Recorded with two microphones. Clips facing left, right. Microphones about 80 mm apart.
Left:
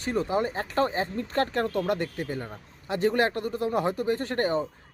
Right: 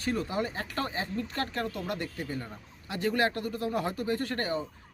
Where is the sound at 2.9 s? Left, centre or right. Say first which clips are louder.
Left 4 dB; left.